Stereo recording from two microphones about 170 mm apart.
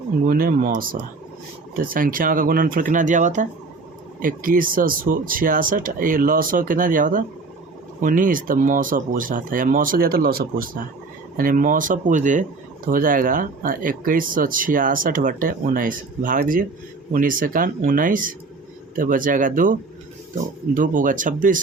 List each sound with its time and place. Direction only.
0.3 s speech: 55° right (ahead or behind)